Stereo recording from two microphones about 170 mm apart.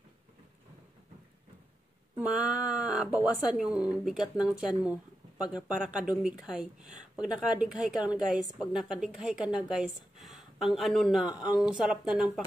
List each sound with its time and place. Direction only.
2.1 s speech: 5° right (ahead or behind)